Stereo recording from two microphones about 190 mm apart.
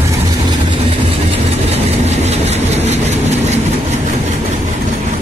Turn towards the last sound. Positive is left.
turn(degrees=-35)  # may be behind; listen again after turning